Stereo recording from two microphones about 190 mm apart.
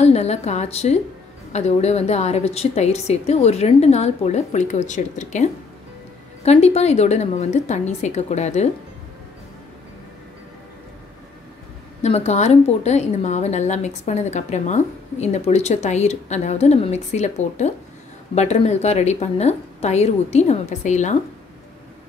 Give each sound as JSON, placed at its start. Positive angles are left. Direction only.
{"t": 0.0, "sound": "a woman's voice", "side_deg": 35}
{"t": 12.0, "sound": "a woman's voice", "side_deg": 35}